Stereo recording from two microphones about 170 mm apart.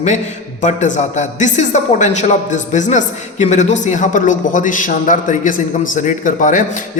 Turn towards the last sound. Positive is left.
turn(degrees=50)  # may be behind; listen again after turning